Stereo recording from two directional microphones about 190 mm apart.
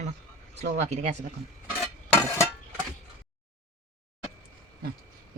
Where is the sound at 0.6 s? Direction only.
35° right (ahead or behind).